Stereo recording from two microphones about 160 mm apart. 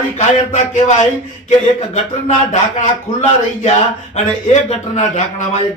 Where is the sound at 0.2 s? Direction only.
45° left (ahead or behind).